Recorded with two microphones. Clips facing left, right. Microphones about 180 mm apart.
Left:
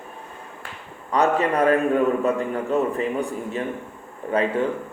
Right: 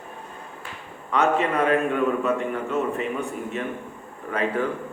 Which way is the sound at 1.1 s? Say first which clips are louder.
Left 2 dB; 40° left (ahead or behind).